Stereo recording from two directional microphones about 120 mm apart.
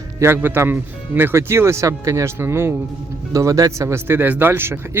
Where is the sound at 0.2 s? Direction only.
20° right (ahead or behind).